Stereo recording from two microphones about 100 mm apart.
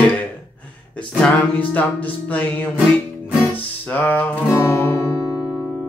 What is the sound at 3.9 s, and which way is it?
Music, 15° left (ahead or behind).